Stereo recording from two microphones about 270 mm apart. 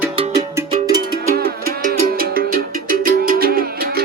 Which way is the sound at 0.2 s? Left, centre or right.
Centre.